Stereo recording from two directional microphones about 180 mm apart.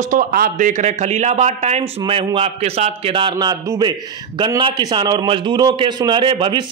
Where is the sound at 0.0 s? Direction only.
50° right (ahead or behind).